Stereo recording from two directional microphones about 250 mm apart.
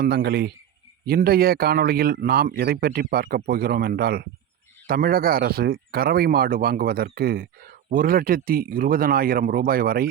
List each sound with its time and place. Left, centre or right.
0.0 s speech: right